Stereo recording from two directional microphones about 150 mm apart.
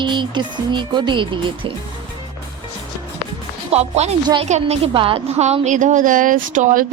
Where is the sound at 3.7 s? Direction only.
45° right (ahead or behind).